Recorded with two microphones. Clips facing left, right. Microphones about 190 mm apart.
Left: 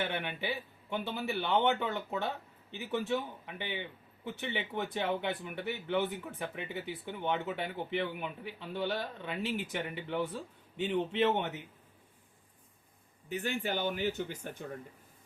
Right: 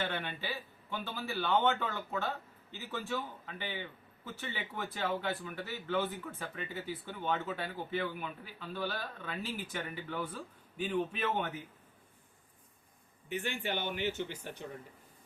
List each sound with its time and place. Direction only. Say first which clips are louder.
0.0 s a man's voice: left 2 dB; 15° left (ahead or behind)
13.2 s speech: left 2 dB; 40° left (ahead or behind)